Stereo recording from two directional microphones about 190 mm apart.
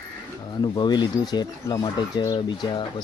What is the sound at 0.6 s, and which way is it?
Speech, 25° left (ahead or behind).